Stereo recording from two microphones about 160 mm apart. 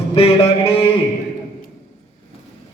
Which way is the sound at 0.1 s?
35° left (ahead or behind).